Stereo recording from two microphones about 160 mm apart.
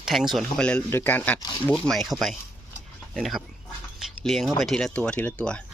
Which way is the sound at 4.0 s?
Centre (ahead or behind).